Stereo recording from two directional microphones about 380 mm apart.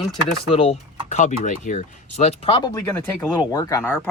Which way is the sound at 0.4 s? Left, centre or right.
Centre.